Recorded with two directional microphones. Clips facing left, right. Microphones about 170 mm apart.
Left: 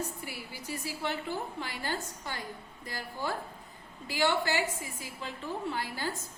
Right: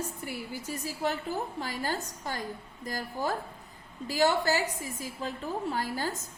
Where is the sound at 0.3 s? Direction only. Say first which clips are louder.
Right 4 dB; 45° right (ahead or behind).